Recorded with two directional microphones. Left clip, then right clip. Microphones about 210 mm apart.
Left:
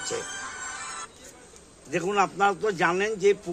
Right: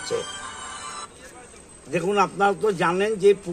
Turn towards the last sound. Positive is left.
turn(degrees=0)  # may be behind; listen again after turning